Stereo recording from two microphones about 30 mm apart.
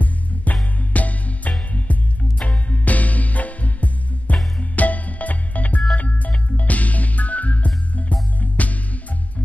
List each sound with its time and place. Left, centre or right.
0.0 s music: left